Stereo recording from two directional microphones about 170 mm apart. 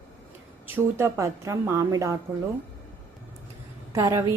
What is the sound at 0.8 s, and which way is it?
A woman's voice, 15° right (ahead or behind).